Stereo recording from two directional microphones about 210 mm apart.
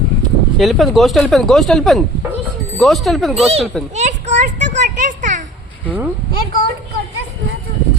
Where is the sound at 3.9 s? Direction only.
35° right (ahead or behind).